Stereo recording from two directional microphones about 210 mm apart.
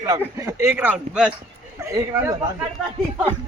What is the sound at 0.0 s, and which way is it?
Speech, 15° right (ahead or behind).